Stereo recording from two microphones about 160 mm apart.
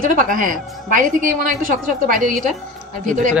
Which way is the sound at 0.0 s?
55° right (ahead or behind).